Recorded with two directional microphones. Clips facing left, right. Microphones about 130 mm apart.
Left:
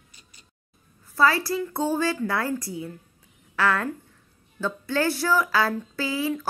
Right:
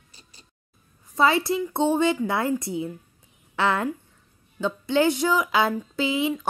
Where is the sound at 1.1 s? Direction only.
20° right (ahead or behind).